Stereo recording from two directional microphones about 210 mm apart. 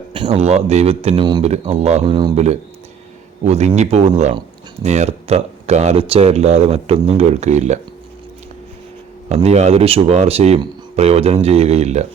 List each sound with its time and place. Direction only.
0.1 s speech: 25° right (ahead or behind)
9.3 s speech: 30° right (ahead or behind)